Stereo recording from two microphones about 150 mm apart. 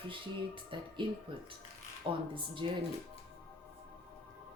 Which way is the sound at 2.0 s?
35° right (ahead or behind).